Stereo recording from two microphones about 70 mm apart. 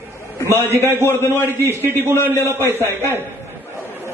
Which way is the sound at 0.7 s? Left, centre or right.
Right.